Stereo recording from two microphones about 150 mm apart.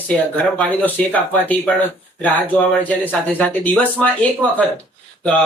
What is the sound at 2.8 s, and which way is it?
A man's voice, 10° left (ahead or behind).